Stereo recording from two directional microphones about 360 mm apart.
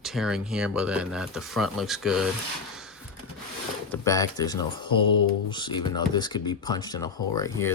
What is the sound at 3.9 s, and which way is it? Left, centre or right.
Speech, centre.